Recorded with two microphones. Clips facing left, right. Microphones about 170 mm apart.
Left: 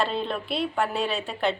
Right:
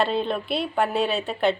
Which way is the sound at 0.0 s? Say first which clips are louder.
Right 3 dB; centre (ahead or behind).